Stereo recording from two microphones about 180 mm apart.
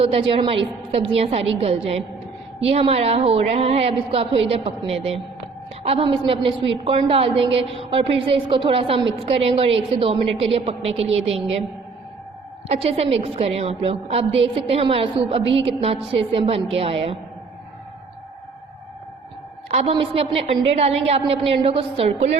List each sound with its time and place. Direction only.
0.0 s a woman's voice: 30° right (ahead or behind)
12.6 s a woman's voice: 35° right (ahead or behind)
19.7 s a woman's voice: 35° right (ahead or behind)